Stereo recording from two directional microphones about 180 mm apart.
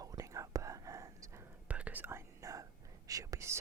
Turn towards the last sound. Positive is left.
turn(degrees=-15)  # may be behind; listen again after turning